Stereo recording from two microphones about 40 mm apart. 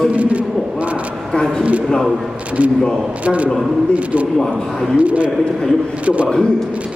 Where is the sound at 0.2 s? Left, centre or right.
Right.